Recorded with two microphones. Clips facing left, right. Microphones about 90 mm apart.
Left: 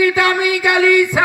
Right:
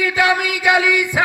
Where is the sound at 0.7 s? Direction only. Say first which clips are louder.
Left 3 dB; 10° right (ahead or behind).